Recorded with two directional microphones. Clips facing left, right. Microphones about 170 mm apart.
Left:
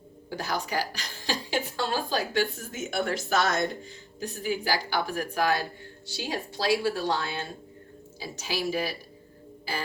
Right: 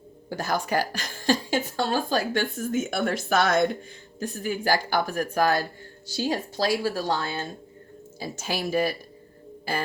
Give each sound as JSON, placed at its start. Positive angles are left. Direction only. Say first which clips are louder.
{"t": 0.3, "sound": "a woman's voice", "louder": "right 4 dB", "side_deg": -45}